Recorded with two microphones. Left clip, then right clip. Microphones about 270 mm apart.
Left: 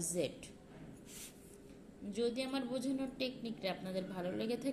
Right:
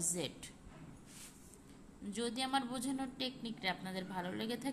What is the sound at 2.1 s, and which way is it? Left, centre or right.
A woman's voice, centre.